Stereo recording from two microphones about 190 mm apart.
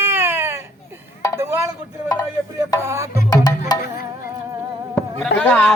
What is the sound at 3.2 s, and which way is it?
Music, 20° left (ahead or behind).